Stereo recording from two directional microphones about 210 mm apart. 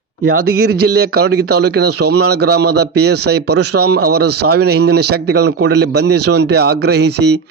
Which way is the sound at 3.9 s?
50° right (ahead or behind).